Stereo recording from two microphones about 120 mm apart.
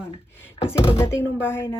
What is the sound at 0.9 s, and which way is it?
Speech, 20° left (ahead or behind).